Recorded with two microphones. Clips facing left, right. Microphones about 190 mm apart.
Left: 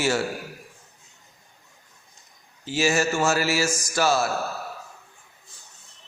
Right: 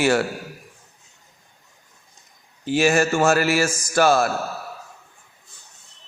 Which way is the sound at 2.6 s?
55° right (ahead or behind).